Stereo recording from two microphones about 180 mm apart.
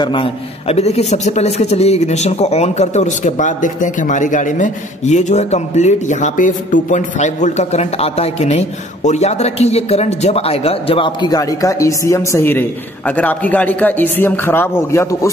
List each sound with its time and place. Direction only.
0.0 s a man's voice: 30° left (ahead or behind)